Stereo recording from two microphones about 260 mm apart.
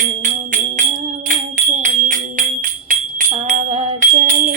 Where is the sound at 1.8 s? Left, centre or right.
Right.